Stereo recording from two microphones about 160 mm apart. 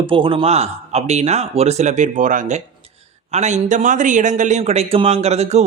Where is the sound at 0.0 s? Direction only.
30° right (ahead or behind).